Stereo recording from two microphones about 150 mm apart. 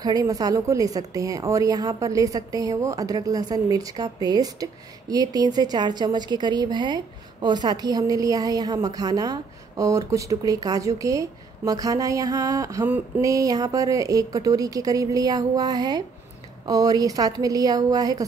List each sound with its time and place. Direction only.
0.0 s a woman's voice: 25° right (ahead or behind)